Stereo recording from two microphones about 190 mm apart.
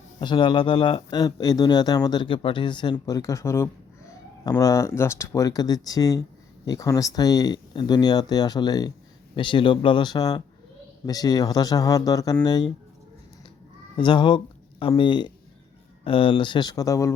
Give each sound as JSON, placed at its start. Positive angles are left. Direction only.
{"t": 0.2, "sound": "speech", "side_deg": 25}
{"t": 13.9, "sound": "speech", "side_deg": 25}